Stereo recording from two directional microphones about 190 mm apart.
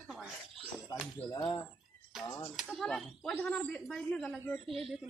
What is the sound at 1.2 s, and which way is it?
Speech, 35° left (ahead or behind).